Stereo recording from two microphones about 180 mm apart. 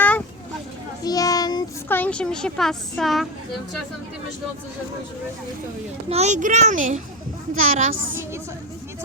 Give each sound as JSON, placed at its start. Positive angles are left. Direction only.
{"t": 1.0, "sound": "child singing", "side_deg": 20}
{"t": 2.0, "sound": "a woman's voice", "side_deg": 5}
{"t": 6.1, "sound": "a child's voice", "side_deg": -40}